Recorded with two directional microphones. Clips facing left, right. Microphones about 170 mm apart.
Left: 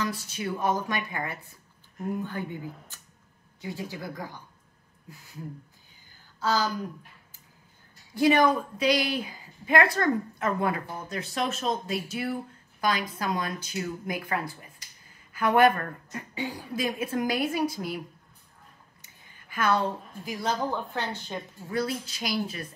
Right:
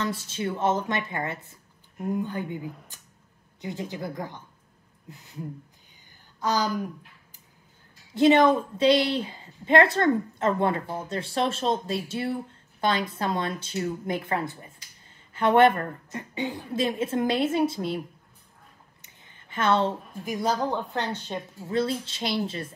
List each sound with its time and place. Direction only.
0.0 s a woman's voice: 25° right (ahead or behind)
6.4 s speech: 15° right (ahead or behind)
8.1 s a woman's voice: 25° right (ahead or behind)
18.9 s a sound: 25° right (ahead or behind)
20.7 s a woman's voice: 20° right (ahead or behind)